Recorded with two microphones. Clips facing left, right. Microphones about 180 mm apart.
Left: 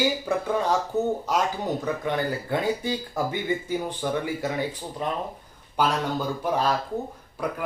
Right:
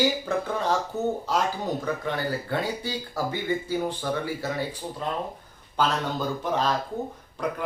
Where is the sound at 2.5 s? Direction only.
20° left (ahead or behind).